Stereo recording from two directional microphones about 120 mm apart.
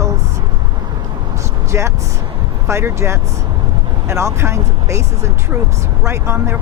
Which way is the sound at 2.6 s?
25° right (ahead or behind).